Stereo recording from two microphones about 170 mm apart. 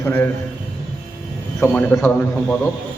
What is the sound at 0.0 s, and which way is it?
Speech, 10° left (ahead or behind).